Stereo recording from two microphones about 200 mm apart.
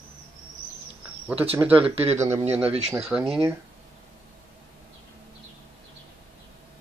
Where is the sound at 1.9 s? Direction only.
30° right (ahead or behind).